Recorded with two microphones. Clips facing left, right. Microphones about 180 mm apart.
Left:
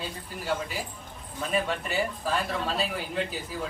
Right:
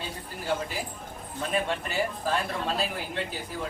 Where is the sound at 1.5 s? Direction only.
Centre (ahead or behind).